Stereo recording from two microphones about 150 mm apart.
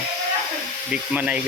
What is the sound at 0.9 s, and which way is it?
Speech, 10° right (ahead or behind).